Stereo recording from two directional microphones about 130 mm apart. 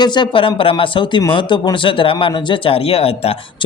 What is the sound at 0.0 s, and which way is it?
Speech, 35° left (ahead or behind).